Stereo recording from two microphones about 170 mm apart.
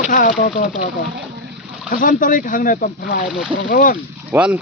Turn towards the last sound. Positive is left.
turn(degrees=-10)  # may be behind; listen again after turning